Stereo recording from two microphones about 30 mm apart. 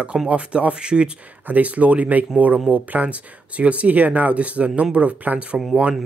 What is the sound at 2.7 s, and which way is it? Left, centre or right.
Speech, right.